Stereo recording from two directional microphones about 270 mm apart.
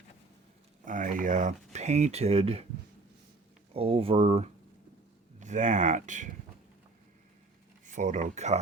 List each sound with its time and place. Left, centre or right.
0.9 s speech: right
3.8 s speech: right
7.9 s speech: right